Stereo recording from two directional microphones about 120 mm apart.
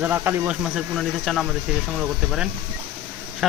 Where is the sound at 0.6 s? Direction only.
5° right (ahead or behind).